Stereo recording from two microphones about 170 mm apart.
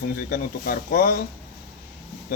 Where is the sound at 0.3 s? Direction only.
60° left (ahead or behind).